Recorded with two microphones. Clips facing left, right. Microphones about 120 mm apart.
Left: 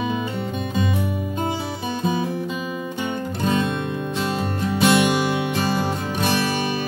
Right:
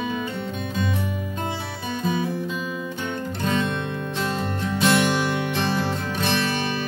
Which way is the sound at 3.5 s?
10° left (ahead or behind).